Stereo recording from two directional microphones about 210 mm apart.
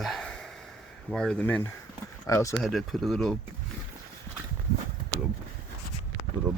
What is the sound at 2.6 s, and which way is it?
Speech, centre (ahead or behind).